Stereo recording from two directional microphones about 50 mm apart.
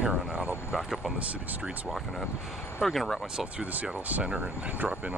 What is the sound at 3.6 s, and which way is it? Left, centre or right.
Speech, right.